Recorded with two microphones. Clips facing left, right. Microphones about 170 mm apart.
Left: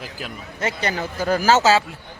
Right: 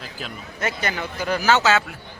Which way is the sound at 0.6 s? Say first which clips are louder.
Left 2 dB; 30° left (ahead or behind).